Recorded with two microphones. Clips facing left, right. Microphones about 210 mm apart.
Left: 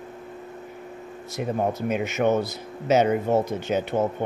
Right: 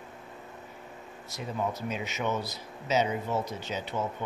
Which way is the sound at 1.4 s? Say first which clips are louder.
Left 7 dB; 55° left (ahead or behind).